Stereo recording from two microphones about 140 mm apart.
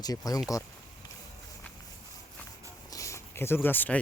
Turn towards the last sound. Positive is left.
turn(degrees=15)  # may be behind; listen again after turning